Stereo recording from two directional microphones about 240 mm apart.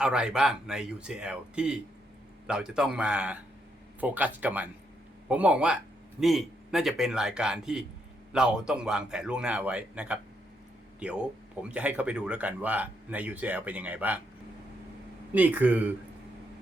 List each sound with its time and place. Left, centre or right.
0.0 s speech: centre
15.4 s speech: centre